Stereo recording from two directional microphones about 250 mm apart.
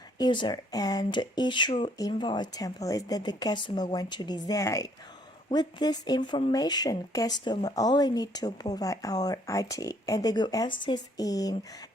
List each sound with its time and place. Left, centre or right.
0.2 s speech: centre